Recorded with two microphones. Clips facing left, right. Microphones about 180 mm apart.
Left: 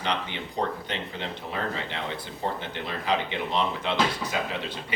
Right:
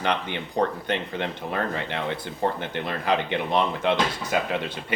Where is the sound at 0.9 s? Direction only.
55° right (ahead or behind).